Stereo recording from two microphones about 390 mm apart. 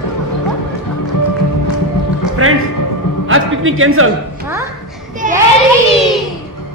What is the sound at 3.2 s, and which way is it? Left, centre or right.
Speech, right.